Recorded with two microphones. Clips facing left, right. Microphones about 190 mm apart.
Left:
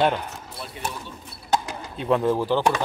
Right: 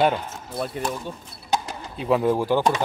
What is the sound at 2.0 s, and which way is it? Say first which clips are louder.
Speech: right 1 dB; 5° right (ahead or behind).